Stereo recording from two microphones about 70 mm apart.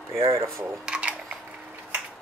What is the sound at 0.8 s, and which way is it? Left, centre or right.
Camera, centre.